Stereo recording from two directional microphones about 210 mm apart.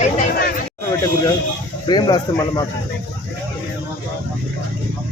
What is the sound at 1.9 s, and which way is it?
Speech, 20° left (ahead or behind).